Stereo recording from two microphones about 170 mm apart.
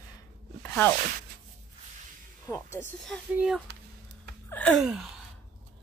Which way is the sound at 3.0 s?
Centre (ahead or behind).